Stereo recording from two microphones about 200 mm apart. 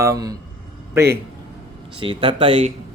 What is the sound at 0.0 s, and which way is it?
A man's voice, 15° right (ahead or behind).